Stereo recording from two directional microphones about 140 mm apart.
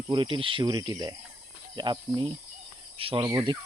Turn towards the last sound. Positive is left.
turn(degrees=-30)  # may be behind; listen again after turning